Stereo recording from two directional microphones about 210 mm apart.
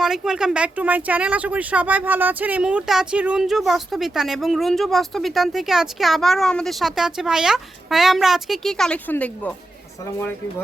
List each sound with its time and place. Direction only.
0.0 s speech: centre (ahead or behind)